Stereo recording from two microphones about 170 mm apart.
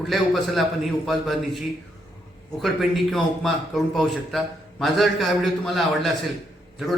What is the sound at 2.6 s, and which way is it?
A man's voice, centre (ahead or behind).